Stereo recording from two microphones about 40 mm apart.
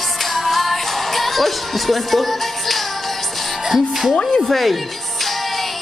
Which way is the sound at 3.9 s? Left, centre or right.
Centre.